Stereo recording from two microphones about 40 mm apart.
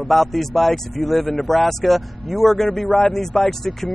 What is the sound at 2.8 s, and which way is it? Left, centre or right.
Speech, left.